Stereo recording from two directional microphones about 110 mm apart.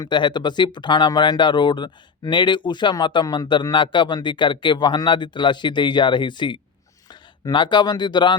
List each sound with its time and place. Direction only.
0.0 s speech: 45° left (ahead or behind)